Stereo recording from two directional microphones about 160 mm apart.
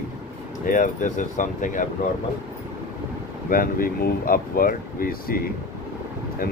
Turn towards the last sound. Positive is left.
turn(degrees=65)  # may be behind; listen again after turning